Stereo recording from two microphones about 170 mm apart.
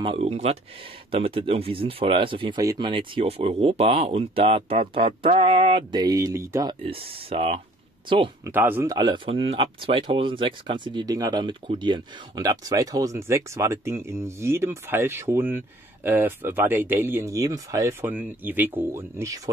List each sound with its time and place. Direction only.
0.0 s speech: 35° right (ahead or behind)
8.5 s speech: 10° right (ahead or behind)
8.9 s speech: 25° right (ahead or behind)